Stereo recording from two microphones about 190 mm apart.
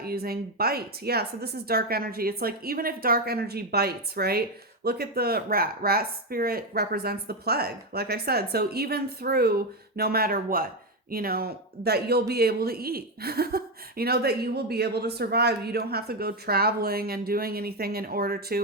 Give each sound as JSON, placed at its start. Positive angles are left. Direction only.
{"t": 0.0, "sound": "speech", "side_deg": -55}